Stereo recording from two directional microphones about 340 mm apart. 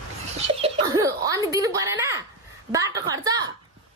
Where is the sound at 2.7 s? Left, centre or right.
Centre.